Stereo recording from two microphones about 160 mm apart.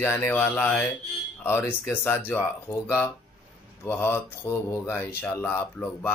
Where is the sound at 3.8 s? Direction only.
15° left (ahead or behind).